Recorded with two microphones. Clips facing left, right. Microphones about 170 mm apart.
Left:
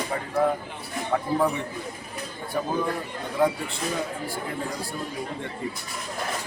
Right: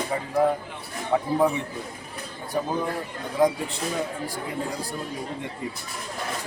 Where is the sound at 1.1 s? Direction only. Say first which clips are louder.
Right 3 dB; 15° right (ahead or behind).